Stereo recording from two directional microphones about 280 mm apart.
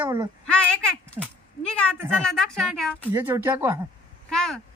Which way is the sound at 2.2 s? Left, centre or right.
Centre.